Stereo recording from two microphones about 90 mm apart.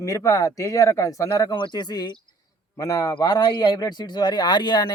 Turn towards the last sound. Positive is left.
turn(degrees=55)  # may be behind; listen again after turning